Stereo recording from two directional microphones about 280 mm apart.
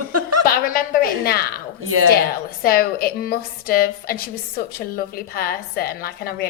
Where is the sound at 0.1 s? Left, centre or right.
Right.